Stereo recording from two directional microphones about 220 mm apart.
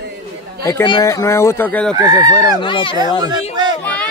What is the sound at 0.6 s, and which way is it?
A child's voice, 15° left (ahead or behind).